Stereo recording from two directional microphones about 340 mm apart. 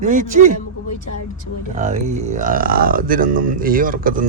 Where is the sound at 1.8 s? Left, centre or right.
Right.